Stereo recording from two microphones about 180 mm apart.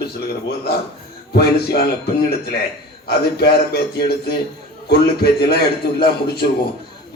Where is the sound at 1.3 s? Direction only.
60° left (ahead or behind).